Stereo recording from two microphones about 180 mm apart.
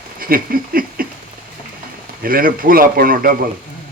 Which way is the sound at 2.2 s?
50° right (ahead or behind).